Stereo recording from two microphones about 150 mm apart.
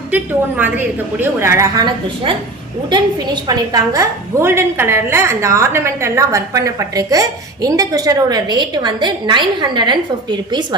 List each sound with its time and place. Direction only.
0.1 s a woman's voice: 10° right (ahead or behind); by 2.3 s 25° right (ahead or behind)
3.4 s a woman's voice: 25° right (ahead or behind)